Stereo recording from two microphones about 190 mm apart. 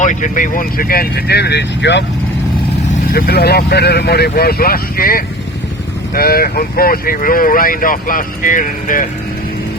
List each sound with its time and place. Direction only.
0.0 s speech: 40° left (ahead or behind); by 2.0 s 65° left (ahead or behind)
2.9 s speech: 50° left (ahead or behind)